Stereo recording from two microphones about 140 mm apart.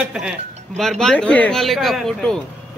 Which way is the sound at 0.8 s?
5° left (ahead or behind).